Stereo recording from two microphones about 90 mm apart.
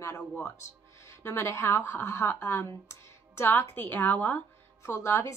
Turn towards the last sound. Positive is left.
turn(degrees=30)  # may be behind; listen again after turning